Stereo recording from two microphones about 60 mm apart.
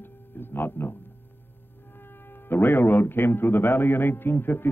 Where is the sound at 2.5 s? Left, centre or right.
Left.